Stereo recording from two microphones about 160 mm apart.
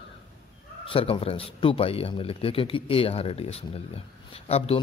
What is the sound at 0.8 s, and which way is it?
A man's voice, 35° left (ahead or behind).